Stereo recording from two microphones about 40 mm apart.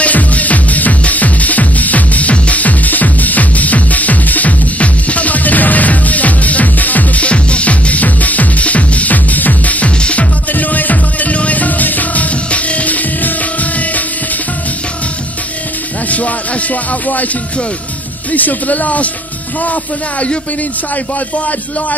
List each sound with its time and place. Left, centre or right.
0.0 s music: left
7.2 s music: left
10.5 s music: left
16.1 s music: left
18.3 s speech: left